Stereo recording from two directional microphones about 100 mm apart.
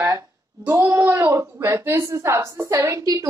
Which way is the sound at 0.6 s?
20° right (ahead or behind).